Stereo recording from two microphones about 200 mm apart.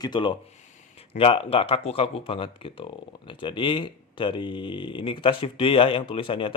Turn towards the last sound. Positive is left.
turn(degrees=25)  # may be behind; listen again after turning